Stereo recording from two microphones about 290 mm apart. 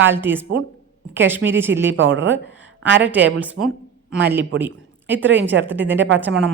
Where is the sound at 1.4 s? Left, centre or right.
Right.